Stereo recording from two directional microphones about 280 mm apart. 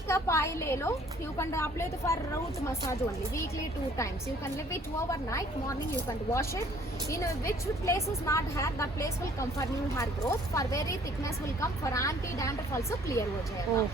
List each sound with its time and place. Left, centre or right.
0.1 s a woman's voice: centre
4.5 s a woman's voice: centre